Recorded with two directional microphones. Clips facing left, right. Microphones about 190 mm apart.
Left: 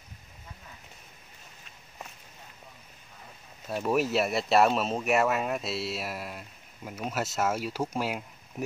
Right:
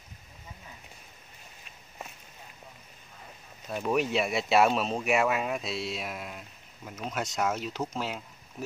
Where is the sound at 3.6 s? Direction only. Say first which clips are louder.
Left 1 dB; 5° left (ahead or behind).